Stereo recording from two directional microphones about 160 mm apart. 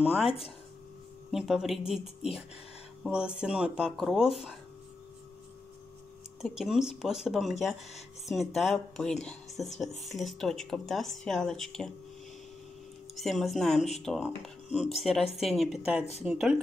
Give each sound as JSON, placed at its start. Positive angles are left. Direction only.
{"t": 1.3, "sound": "speech", "side_deg": -5}
{"t": 6.4, "sound": "speech", "side_deg": 0}
{"t": 13.1, "sound": "speech", "side_deg": 0}
{"t": 13.7, "sound": "speech", "side_deg": 45}
{"t": 14.0, "sound": "speech", "side_deg": 0}
{"t": 14.7, "sound": "speech", "side_deg": 45}
{"t": 15.0, "sound": "speech", "side_deg": 0}